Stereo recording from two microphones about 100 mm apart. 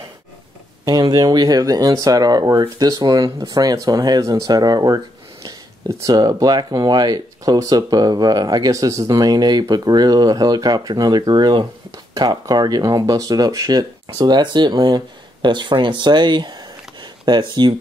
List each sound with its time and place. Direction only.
0.8 s speech: 40° right (ahead or behind)
5.9 s speech: 30° right (ahead or behind); by 17.7 s 50° right (ahead or behind)